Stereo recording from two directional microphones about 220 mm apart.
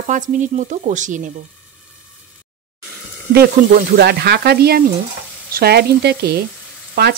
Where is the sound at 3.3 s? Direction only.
45° right (ahead or behind).